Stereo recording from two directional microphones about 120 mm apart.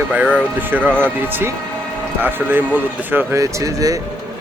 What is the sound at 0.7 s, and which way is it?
Speech, 15° right (ahead or behind).